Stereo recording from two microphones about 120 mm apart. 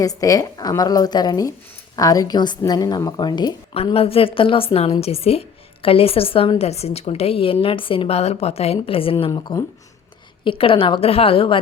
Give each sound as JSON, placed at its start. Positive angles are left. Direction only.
{"t": 0.0, "sound": "a woman's voice", "side_deg": 30}
{"t": 3.9, "sound": "a woman's voice", "side_deg": 50}
{"t": 9.2, "sound": "a woman's voice", "side_deg": 40}
{"t": 10.4, "sound": "a woman's voice", "side_deg": 50}